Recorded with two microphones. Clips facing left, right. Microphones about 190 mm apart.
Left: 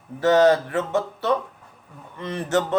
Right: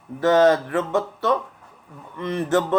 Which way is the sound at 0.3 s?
25° left (ahead or behind).